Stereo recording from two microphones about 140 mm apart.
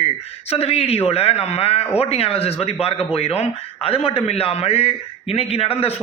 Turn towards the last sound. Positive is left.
turn(degrees=45)  # may be behind; listen again after turning